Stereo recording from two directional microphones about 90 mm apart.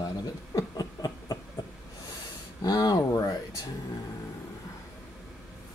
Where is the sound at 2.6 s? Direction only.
45° left (ahead or behind).